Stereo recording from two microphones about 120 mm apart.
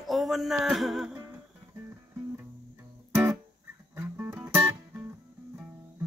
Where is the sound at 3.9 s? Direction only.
15° right (ahead or behind).